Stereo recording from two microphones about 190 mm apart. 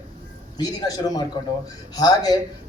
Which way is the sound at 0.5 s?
20° left (ahead or behind).